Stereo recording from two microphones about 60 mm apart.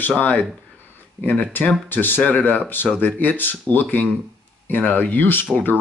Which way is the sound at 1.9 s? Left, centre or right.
Left.